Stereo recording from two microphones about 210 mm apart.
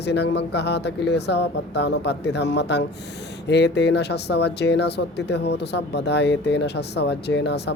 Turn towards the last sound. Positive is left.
turn(degrees=55)  # may be behind; listen again after turning